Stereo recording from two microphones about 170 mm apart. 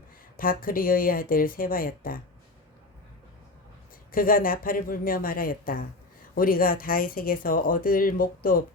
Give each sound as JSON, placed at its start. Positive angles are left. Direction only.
{"t": 0.3, "sound": "speech", "side_deg": 55}
{"t": 4.1, "sound": "speech", "side_deg": 55}